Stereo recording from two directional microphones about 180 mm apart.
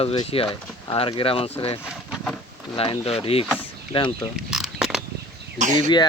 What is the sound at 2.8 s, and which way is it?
Speech, 35° left (ahead or behind).